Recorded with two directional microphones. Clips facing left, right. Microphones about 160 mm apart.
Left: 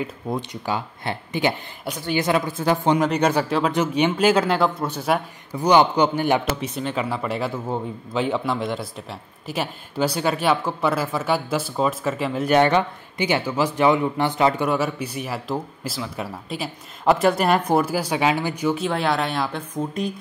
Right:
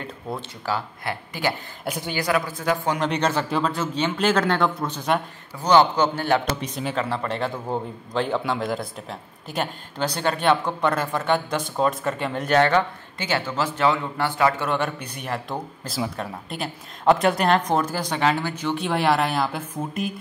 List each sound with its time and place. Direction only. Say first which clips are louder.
0.3 s speech: left 1 dB; 20° left (ahead or behind)
3.0 s speech: left 3 dB; 5° left (ahead or behind)
3.4 s speech: left 2 dB; centre (ahead or behind)
3.7 s speech: left 5 dB; 15° left (ahead or behind)
12.5 s speech: left 1 dB; 15° left (ahead or behind)
14.7 s speech: left 3 dB; 10° left (ahead or behind)